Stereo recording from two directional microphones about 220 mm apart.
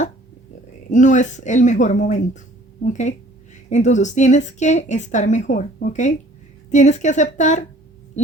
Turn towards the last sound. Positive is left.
turn(degrees=35)  # may be behind; listen again after turning